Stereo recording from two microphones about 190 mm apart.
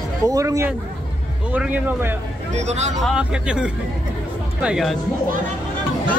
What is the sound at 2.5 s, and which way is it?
Speech, 35° right (ahead or behind).